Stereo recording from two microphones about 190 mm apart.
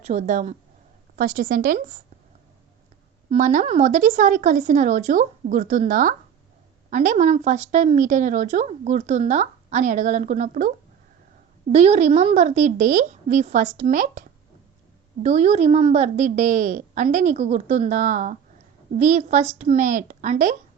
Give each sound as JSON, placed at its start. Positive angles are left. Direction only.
{"t": 0.0, "sound": "a woman's voice", "side_deg": -40}
{"t": 3.2, "sound": "speech", "side_deg": -40}
{"t": 11.7, "sound": "speech", "side_deg": -35}